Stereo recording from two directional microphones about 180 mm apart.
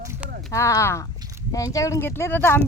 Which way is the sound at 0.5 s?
15° left (ahead or behind).